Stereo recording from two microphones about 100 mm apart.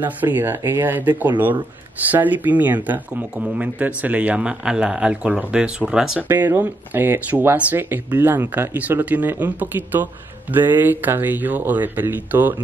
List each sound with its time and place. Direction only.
0.0 s a man's voice: 20° right (ahead or behind)
6.2 s speech: 20° right (ahead or behind)